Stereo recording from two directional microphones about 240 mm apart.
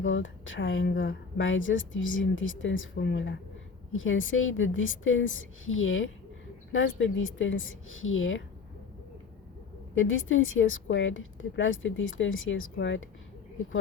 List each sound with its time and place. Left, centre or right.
0.0 s a woman's voice: left
9.9 s a woman's voice: left